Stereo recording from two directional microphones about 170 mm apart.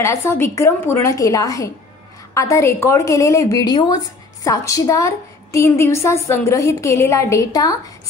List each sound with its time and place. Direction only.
0.0 s a woman's voice: 15° left (ahead or behind)